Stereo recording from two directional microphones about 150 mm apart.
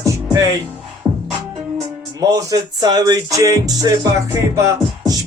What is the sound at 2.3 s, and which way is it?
Music, 25° right (ahead or behind).